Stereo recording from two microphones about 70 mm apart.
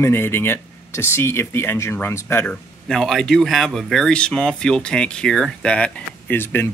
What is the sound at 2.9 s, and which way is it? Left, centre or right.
Speech, centre.